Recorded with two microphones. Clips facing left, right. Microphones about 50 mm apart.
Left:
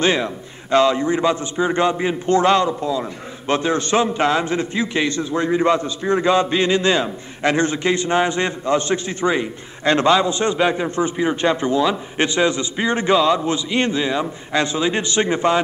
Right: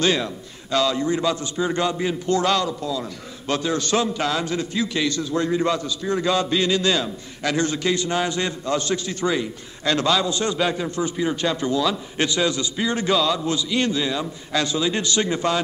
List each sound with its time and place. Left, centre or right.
0.0 s a man's voice: left